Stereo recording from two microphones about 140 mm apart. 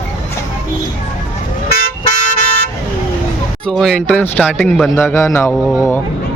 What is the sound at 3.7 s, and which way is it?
Speech, 5° left (ahead or behind).